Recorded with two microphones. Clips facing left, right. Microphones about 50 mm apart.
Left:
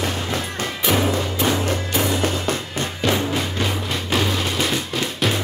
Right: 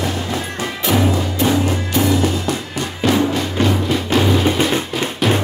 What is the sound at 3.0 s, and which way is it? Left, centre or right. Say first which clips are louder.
Music: right 4 dB; centre.